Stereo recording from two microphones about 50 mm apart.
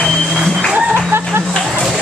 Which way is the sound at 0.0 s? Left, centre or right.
Centre.